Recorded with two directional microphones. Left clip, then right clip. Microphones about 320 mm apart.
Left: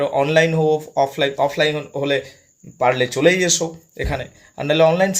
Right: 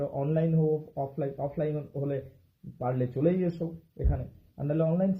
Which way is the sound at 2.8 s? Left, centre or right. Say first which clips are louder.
Left 14 dB; left.